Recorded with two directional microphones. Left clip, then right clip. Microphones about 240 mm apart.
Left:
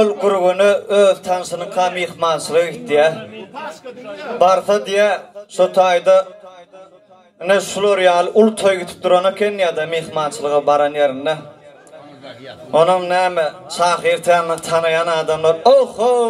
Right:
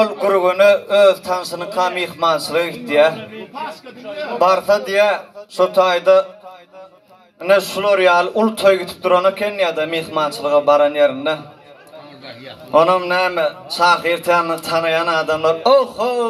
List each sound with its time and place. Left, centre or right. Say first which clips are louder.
0.0 s speech: left 1 dB; left
4.4 s speech: left 1 dB; left
7.4 s speech: even; left
12.7 s speech: even; left